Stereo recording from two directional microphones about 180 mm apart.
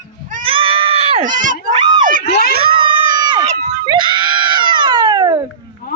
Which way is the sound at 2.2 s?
65° left (ahead or behind).